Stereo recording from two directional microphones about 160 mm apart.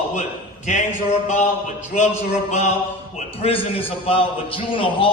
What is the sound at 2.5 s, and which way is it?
A man's voice, 45° left (ahead or behind).